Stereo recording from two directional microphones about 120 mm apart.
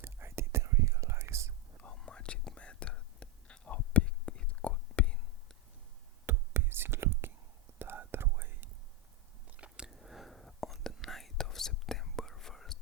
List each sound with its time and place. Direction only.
0.0 s whispering: 20° right (ahead or behind)
1.8 s whispering: 10° left (ahead or behind)
6.2 s whispering: 20° right (ahead or behind); by 12.8 s 5° left (ahead or behind)